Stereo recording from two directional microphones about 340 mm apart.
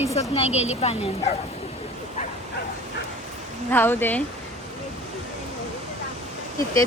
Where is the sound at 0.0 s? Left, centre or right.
Centre.